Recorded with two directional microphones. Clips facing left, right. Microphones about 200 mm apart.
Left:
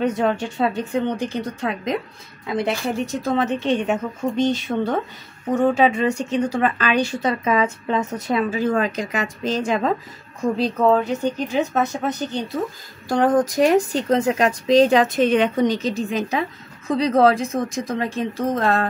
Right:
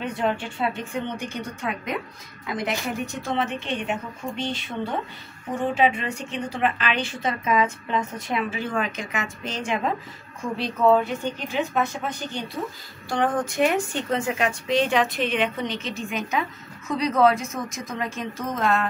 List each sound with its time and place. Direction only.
0.0 s speech: 40° left (ahead or behind)
3.3 s speech: 40° left (ahead or behind)